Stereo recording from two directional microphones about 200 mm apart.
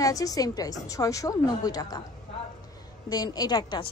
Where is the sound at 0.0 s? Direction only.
15° left (ahead or behind).